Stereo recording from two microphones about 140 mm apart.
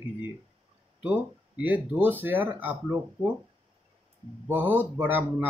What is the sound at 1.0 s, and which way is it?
Speech, 10° right (ahead or behind).